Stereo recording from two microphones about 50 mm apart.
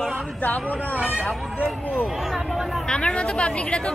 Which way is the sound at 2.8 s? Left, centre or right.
Centre.